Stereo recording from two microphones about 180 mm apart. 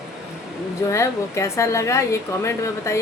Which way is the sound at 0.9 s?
15° left (ahead or behind).